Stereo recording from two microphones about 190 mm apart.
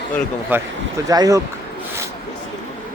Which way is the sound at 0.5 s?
10° right (ahead or behind).